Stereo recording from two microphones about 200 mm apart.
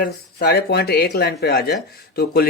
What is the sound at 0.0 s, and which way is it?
Speech, 55° left (ahead or behind).